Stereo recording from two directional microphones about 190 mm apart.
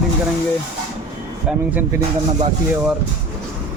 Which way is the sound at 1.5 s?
5° right (ahead or behind).